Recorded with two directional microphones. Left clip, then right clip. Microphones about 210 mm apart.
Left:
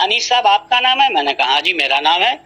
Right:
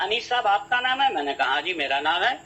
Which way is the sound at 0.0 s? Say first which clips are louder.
Left 10 dB; 35° left (ahead or behind).